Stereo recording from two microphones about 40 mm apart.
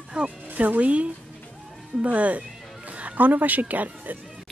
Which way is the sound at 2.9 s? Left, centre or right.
Right.